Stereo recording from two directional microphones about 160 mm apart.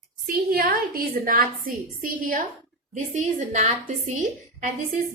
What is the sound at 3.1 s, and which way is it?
Speech, 50° right (ahead or behind).